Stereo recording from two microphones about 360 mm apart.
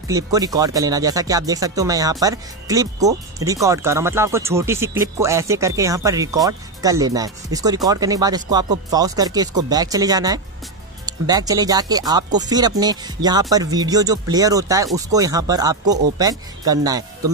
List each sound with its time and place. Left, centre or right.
0.1 s speech: centre